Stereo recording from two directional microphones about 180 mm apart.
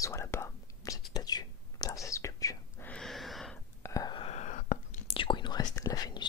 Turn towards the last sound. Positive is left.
turn(degrees=20)  # may be behind; listen again after turning